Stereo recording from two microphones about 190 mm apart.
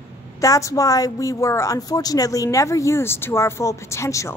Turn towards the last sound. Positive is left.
turn(degrees=15)  # may be behind; listen again after turning